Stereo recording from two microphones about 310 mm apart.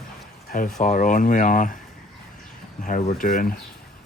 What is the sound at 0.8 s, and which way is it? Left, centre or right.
Speech, left.